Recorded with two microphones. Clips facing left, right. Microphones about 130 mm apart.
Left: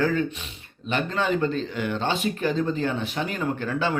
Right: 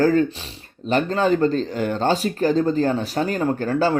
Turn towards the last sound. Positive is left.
turn(degrees=-40)  # may be behind; listen again after turning